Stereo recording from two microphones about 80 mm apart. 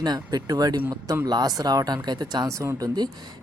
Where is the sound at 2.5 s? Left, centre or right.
Right.